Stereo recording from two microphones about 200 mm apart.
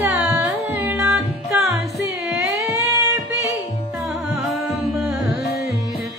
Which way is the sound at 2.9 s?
15° right (ahead or behind).